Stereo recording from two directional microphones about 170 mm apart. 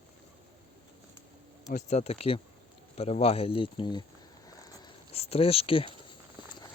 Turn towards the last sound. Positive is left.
turn(degrees=35)  # may be behind; listen again after turning